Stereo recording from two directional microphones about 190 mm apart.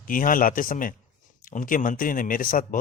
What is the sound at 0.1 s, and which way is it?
A man's voice, 45° left (ahead or behind).